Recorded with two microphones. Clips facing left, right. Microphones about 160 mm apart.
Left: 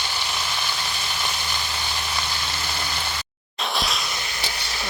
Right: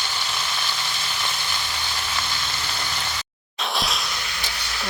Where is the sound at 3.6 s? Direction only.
Centre (ahead or behind).